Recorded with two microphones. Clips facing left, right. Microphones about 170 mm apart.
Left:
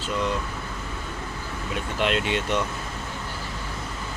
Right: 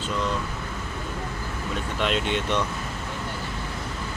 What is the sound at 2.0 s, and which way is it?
Speech, 5° left (ahead or behind).